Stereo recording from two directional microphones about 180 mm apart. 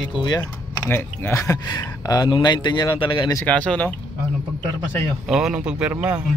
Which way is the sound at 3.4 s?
5° left (ahead or behind).